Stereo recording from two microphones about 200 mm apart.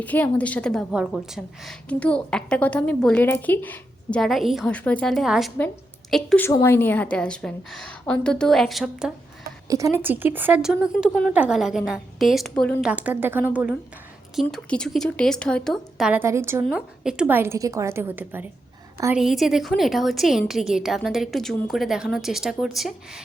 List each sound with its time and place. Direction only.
0.0 s a woman's voice: 10° left (ahead or behind)
9.6 s a woman's voice: 15° right (ahead or behind); by 12.8 s 5° left (ahead or behind)
12.8 s a woman's voice: 5° right (ahead or behind)
16.6 s a woman's voice: centre (ahead or behind)